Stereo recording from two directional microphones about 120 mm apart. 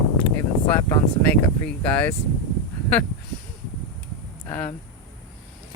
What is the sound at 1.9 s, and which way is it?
Speech, 10° left (ahead or behind).